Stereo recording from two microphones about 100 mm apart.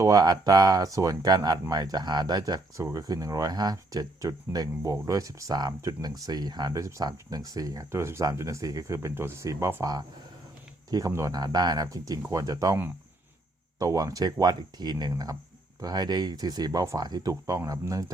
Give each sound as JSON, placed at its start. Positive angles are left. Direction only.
{"t": 0.0, "sound": "speech", "side_deg": -40}
{"t": 7.9, "sound": "speech", "side_deg": -25}
{"t": 10.9, "sound": "speech", "side_deg": -35}
{"t": 11.3, "sound": "speech", "side_deg": -45}